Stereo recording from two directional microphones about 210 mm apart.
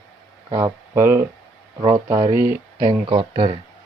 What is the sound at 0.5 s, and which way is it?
Speech, 15° right (ahead or behind).